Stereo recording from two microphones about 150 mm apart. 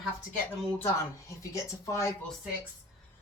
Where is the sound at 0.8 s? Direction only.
20° left (ahead or behind).